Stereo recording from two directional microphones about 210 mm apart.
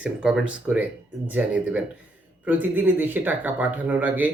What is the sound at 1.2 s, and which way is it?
Speech, 5° right (ahead or behind).